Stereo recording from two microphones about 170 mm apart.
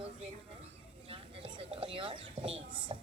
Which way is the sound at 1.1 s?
30° right (ahead or behind).